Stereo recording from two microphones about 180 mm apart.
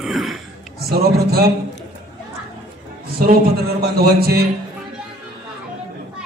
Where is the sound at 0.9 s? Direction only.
60° right (ahead or behind).